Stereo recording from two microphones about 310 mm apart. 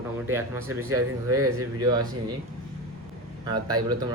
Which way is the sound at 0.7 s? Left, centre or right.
Right.